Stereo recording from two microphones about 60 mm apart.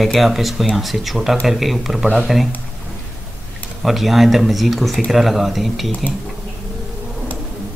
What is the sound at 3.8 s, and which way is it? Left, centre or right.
Speech, centre.